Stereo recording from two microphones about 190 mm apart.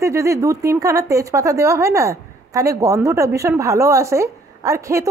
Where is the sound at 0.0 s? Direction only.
15° right (ahead or behind).